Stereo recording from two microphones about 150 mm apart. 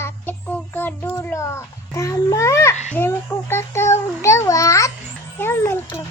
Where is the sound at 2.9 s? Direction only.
15° left (ahead or behind).